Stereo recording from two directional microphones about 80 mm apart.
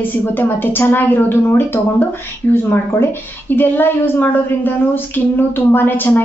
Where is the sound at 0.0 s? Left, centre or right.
Left.